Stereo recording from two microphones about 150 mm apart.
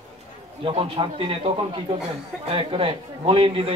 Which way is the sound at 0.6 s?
35° right (ahead or behind).